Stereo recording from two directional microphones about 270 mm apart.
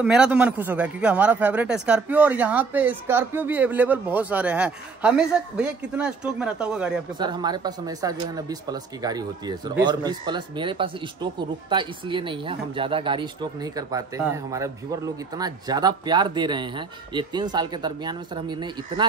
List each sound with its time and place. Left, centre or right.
0.0 s a man's voice: centre
7.2 s speech: centre